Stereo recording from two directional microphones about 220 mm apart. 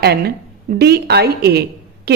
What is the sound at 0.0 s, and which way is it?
A woman's voice, 45° right (ahead or behind).